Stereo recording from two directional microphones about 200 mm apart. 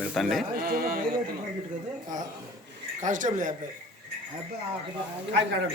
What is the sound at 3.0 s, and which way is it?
Speech, 40° right (ahead or behind).